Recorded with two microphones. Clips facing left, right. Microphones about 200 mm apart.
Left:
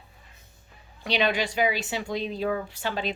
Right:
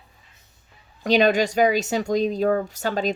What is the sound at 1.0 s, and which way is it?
A woman's voice, 45° right (ahead or behind).